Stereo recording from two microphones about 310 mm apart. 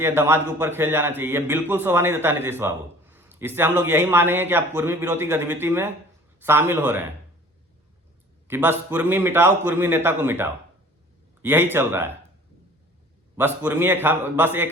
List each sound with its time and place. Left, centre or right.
0.0 s a man's voice: centre
8.4 s a man's voice: centre
13.3 s a man's voice: centre